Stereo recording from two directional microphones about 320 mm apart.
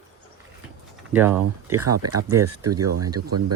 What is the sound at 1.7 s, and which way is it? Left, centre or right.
Speech, right.